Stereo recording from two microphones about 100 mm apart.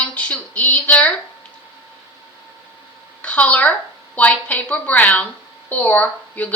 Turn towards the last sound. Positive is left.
turn(degrees=15)  # may be behind; listen again after turning